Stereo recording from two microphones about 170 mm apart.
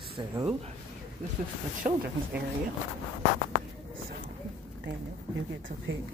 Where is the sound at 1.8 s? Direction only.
45° right (ahead or behind).